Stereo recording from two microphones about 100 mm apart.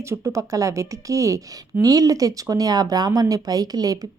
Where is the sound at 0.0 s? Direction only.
30° right (ahead or behind).